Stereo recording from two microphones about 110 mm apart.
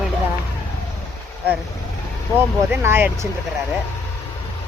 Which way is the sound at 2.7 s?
20° right (ahead or behind).